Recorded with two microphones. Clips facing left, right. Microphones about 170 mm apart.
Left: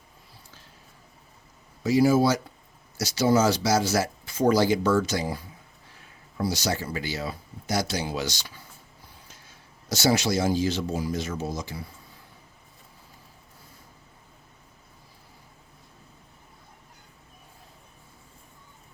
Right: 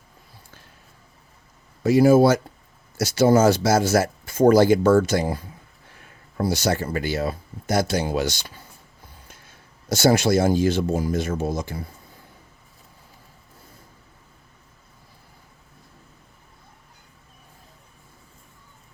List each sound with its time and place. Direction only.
1.8 s speech: 55° right (ahead or behind)